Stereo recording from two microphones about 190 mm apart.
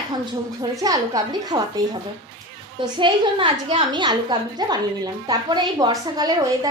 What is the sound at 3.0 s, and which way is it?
A woman's voice, 25° right (ahead or behind).